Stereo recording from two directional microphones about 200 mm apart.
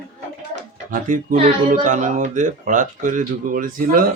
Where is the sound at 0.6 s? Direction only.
40° right (ahead or behind).